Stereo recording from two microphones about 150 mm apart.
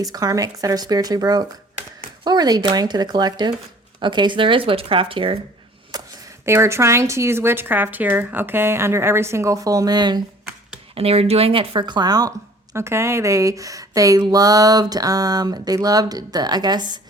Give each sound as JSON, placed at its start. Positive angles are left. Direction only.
{"t": 0.0, "sound": "speech", "side_deg": -25}
{"t": 5.9, "sound": "a sound", "side_deg": -25}
{"t": 6.4, "sound": "a woman's voice", "side_deg": -15}
{"t": 10.9, "sound": "speech", "side_deg": -40}